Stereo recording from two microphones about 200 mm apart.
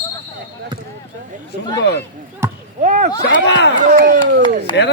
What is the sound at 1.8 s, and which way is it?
Speech, 60° left (ahead or behind).